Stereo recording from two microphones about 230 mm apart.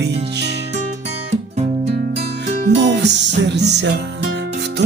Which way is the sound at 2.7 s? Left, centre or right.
Right.